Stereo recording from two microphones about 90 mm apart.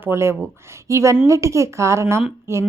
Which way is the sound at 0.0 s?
30° right (ahead or behind).